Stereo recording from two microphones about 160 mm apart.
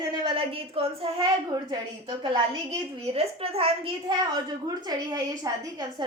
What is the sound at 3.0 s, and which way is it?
A woman's voice, 40° right (ahead or behind).